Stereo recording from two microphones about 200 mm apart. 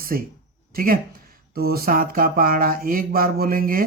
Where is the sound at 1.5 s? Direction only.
50° right (ahead or behind).